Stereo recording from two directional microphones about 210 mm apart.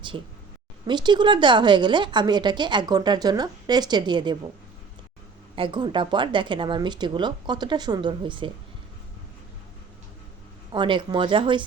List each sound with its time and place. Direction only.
0.1 s a woman's voice: 25° right (ahead or behind)
5.5 s a woman's voice: 25° right (ahead or behind)
10.7 s a woman's voice: 25° right (ahead or behind)